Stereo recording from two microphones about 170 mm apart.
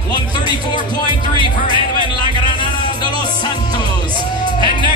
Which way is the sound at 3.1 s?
25° left (ahead or behind).